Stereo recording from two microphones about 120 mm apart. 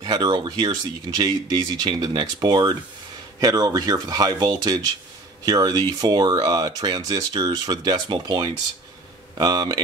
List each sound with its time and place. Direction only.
0.0 s speech: 35° right (ahead or behind)